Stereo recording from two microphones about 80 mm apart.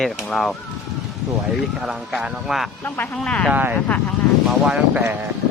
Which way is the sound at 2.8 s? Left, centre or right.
Left.